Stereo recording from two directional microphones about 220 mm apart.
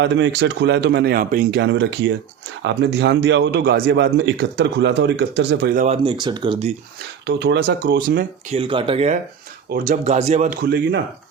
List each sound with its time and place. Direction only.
0.0 s speech: 55° right (ahead or behind)
5.7 s speech: 35° right (ahead or behind)
6.0 s speech: 20° right (ahead or behind)
7.3 s speech: 50° right (ahead or behind)
8.4 s speech: 25° right (ahead or behind)
9.6 s speech: 40° right (ahead or behind)